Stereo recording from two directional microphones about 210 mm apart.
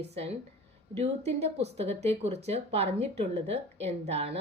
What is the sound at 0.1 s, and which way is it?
Speech, 30° right (ahead or behind).